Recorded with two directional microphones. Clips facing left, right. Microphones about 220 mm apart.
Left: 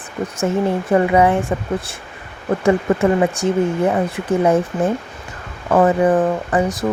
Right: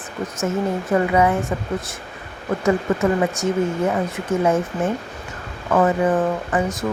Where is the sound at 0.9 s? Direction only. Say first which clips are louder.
Left 3 dB; 30° left (ahead or behind).